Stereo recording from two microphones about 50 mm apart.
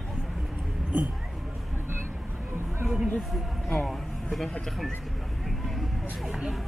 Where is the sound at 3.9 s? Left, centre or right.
Centre.